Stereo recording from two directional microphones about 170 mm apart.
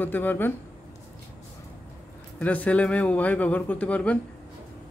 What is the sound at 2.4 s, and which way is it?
Speech, 10° left (ahead or behind).